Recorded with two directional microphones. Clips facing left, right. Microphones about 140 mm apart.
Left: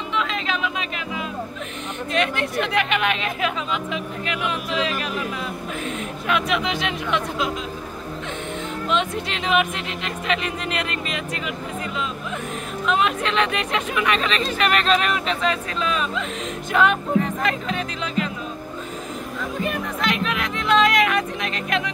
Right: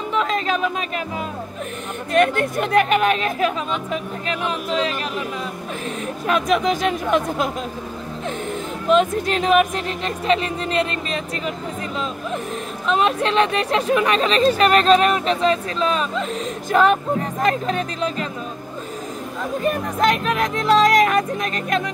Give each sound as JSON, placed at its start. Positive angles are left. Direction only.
{"t": 0.1, "sound": "chatter", "side_deg": -40}
{"t": 2.1, "sound": "speech", "side_deg": -50}
{"t": 8.8, "sound": "speech", "side_deg": -45}
{"t": 12.8, "sound": "speech", "side_deg": -35}
{"t": 19.6, "sound": "speech", "side_deg": -40}